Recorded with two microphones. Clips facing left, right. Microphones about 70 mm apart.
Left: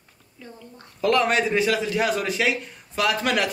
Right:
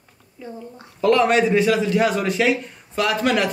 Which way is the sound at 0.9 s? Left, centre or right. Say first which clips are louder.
Right 4 dB; centre.